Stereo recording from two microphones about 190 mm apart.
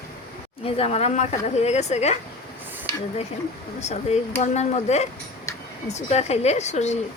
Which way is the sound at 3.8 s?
35° left (ahead or behind).